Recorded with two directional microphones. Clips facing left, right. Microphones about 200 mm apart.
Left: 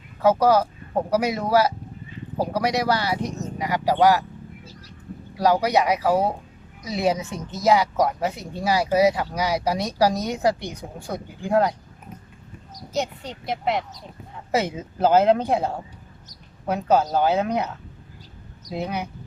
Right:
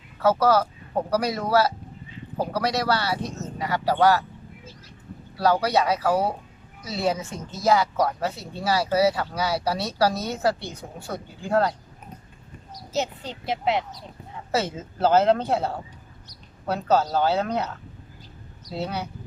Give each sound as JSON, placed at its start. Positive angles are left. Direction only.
{"t": 0.2, "sound": "a woman's voice", "side_deg": 15}
{"t": 5.4, "sound": "a woman's voice", "side_deg": 15}
{"t": 14.5, "sound": "a woman's voice", "side_deg": 15}
{"t": 18.7, "sound": "a woman's voice", "side_deg": 15}